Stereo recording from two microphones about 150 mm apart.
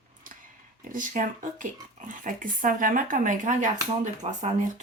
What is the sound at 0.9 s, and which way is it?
Speech, 60° right (ahead or behind).